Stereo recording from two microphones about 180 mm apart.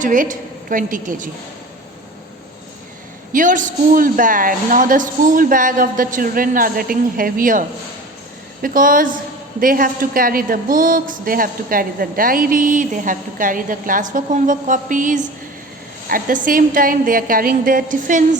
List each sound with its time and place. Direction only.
0.0 s a woman's voice: 45° right (ahead or behind)
3.3 s a woman's voice: 45° right (ahead or behind)
8.6 s a woman's voice: 50° right (ahead or behind)